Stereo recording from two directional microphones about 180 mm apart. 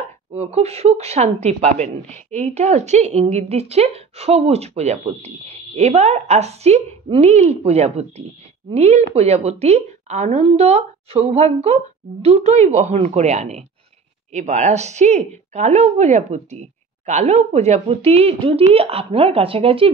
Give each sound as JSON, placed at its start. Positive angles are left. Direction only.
{"t": 0.3, "sound": "speech", "side_deg": -35}